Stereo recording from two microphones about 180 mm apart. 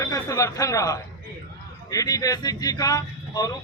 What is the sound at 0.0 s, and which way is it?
Speech, 20° left (ahead or behind).